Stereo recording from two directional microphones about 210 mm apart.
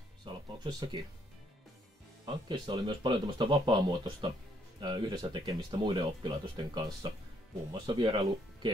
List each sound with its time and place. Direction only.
0.2 s music: 20° right (ahead or behind)
2.2 s speech: 20° right (ahead or behind)